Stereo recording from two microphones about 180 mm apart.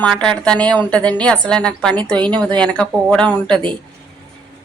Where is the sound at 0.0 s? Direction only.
5° left (ahead or behind).